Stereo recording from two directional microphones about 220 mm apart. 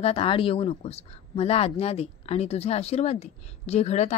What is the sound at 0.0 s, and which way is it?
Speech, 25° left (ahead or behind).